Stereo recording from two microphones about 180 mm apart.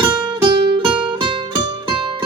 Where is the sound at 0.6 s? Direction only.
25° right (ahead or behind).